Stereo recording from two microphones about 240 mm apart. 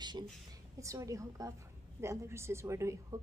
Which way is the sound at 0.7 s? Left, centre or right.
Centre.